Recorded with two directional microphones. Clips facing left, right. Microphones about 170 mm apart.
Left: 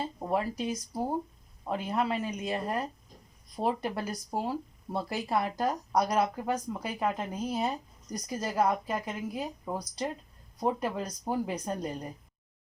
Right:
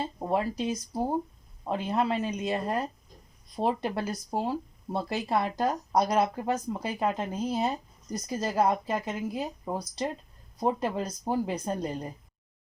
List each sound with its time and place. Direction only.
0.3 s speech: 25° right (ahead or behind)